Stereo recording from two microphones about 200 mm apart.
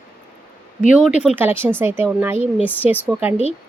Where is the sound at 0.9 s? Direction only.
5° right (ahead or behind).